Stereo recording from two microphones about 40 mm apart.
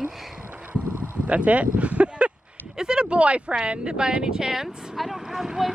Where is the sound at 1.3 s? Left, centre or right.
Right; by 4.6 s centre.